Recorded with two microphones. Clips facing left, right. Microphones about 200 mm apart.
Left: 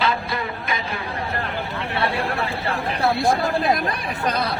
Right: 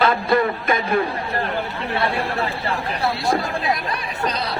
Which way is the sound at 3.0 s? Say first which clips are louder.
Left 3 dB; 55° left (ahead or behind).